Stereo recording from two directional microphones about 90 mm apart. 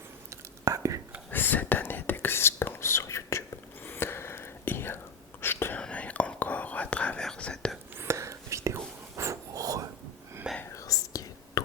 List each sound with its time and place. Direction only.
0.3 s whispering: 35° right (ahead or behind)
1.3 s whispering: 20° left (ahead or behind)
5.8 s whispering: 15° left (ahead or behind)
7.9 s whispering: 30° right (ahead or behind)
10.8 s whispering: 40° left (ahead or behind)